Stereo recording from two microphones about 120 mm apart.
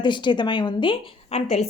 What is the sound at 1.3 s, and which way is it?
Speech, 65° left (ahead or behind).